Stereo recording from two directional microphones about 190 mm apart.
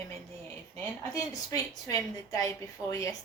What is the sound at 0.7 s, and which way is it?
A woman's voice, 15° left (ahead or behind).